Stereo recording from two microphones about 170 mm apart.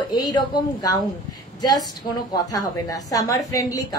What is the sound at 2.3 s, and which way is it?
Speech, 20° left (ahead or behind).